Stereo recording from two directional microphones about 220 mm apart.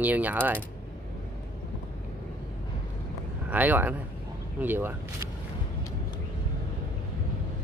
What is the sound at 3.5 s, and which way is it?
Speech, 5° right (ahead or behind).